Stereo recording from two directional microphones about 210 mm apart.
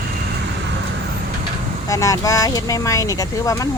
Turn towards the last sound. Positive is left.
turn(degrees=15)  # may be behind; listen again after turning